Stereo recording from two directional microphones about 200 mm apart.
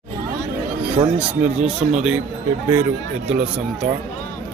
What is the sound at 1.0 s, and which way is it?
Speech, 25° right (ahead or behind).